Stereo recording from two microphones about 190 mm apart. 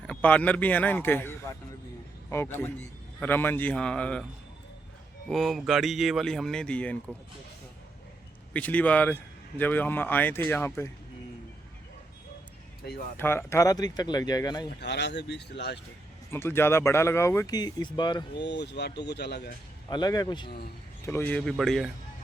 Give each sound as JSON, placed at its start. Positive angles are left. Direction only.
{"t": 0.0, "sound": "a man's voice", "side_deg": 5}
{"t": 5.3, "sound": "speech", "side_deg": 0}
{"t": 8.5, "sound": "speech", "side_deg": 10}
{"t": 13.1, "sound": "speech", "side_deg": 10}
{"t": 14.8, "sound": "speech", "side_deg": 65}
{"t": 16.3, "sound": "speech", "side_deg": 10}
{"t": 18.3, "sound": "speech", "side_deg": 65}
{"t": 19.9, "sound": "speech", "side_deg": 20}
{"t": 21.1, "sound": "speech", "side_deg": 10}